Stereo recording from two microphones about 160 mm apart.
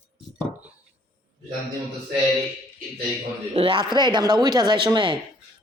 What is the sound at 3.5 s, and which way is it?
Speech, 30° right (ahead or behind).